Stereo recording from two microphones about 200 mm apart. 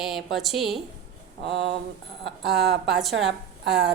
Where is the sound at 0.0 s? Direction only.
Centre (ahead or behind).